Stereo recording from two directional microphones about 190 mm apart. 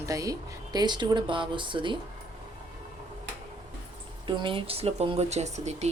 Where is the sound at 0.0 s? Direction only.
15° right (ahead or behind).